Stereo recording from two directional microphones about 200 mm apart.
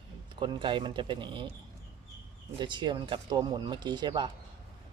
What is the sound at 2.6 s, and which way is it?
Speech, 25° right (ahead or behind).